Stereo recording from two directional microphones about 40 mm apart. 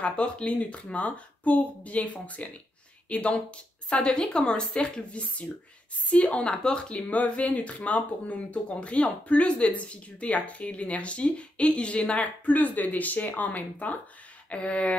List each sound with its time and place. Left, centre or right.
0.0 s speech: left
6.0 s speech: left